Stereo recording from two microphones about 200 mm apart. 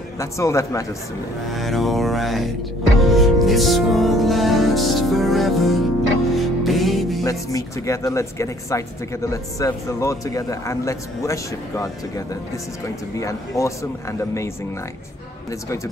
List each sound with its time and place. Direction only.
0.2 s speech: 15° left (ahead or behind)
1.5 s music: centre (ahead or behind)
7.2 s speech: 15° left (ahead or behind)